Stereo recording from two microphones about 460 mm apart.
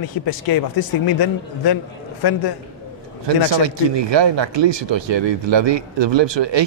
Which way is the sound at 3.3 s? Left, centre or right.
Right.